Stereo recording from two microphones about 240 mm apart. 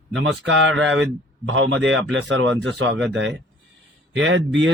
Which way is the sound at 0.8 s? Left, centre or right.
Right.